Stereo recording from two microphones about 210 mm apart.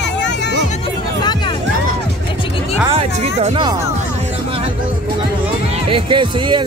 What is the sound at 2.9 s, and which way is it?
Music, 30° right (ahead or behind).